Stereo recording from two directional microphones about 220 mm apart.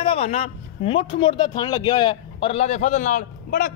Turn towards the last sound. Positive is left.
turn(degrees=40)  # may be behind; listen again after turning